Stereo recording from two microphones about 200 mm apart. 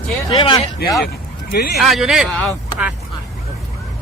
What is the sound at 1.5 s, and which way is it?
Speech, 50° left (ahead or behind).